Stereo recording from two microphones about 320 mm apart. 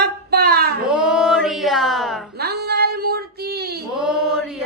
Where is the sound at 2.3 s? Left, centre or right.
Right.